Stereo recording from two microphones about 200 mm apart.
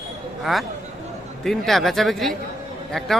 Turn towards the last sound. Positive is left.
turn(degrees=0)  # may be behind; listen again after turning